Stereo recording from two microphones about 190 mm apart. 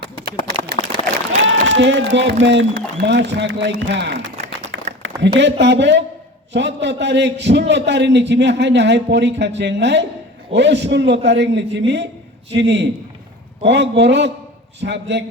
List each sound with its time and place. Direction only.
0.0 s a sound: 60° right (ahead or behind)
0.8 s run: 35° left (ahead or behind)
1.5 s a man's voice: 75° right (ahead or behind)